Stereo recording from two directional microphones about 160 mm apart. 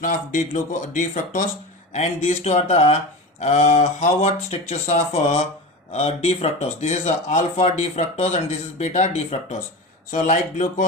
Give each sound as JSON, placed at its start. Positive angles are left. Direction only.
{"t": 0.0, "sound": "speech", "side_deg": 55}